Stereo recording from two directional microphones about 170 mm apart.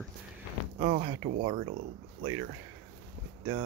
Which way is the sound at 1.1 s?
90° right.